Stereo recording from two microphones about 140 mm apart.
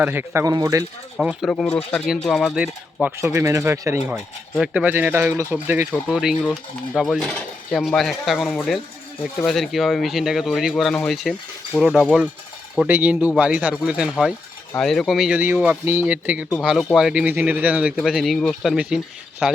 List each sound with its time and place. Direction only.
0.0 s speech: 15° right (ahead or behind)
1.2 s speech: 5° right (ahead or behind)
1.5 s speech: 5° left (ahead or behind)
3.2 s speech: 20° right (ahead or behind)
4.6 s speech: 10° right (ahead or behind)
6.1 s speech: 5° right (ahead or behind)